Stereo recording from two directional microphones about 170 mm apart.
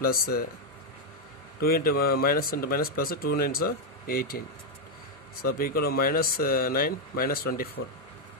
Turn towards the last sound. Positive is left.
turn(degrees=60)  # may be behind; listen again after turning